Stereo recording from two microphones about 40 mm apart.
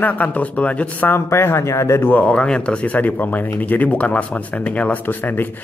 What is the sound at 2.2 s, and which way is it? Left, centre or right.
Speech, left.